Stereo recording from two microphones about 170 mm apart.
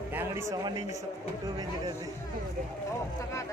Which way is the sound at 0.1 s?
15° right (ahead or behind).